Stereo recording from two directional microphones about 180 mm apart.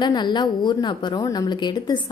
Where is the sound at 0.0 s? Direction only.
25° left (ahead or behind).